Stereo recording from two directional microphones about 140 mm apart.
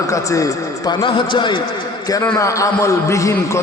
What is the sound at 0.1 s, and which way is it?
Speech, 25° left (ahead or behind).